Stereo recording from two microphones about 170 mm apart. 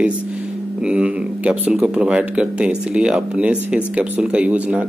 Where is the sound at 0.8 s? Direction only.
5° right (ahead or behind).